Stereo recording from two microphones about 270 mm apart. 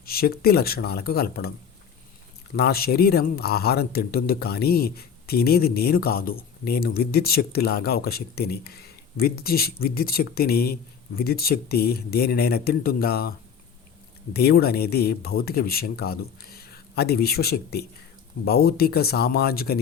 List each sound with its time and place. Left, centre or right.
0.0 s speech: left
2.6 s speech: left
14.3 s speech: left